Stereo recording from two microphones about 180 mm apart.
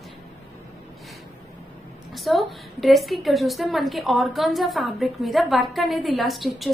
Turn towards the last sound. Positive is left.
turn(degrees=0)  # may be behind; listen again after turning